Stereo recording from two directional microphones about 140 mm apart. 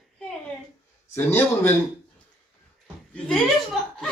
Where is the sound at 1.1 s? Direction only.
15° left (ahead or behind).